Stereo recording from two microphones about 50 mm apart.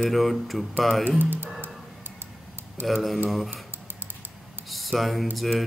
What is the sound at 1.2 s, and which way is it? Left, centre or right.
Speech, right.